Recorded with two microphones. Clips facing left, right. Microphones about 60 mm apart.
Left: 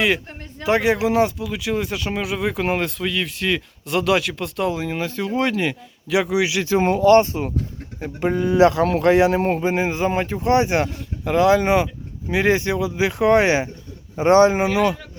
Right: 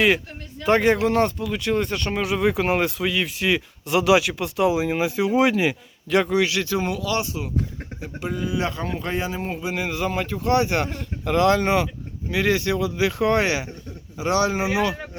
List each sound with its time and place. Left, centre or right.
0.6 s speech: centre
6.7 s speech: left
8.5 s speech: left
9.6 s speech: left
9.8 s speech: left
14.2 s speech: left